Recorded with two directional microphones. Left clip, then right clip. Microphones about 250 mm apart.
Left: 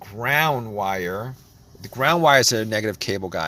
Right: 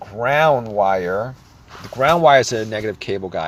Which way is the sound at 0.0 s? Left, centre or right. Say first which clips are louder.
Right 5 dB; left.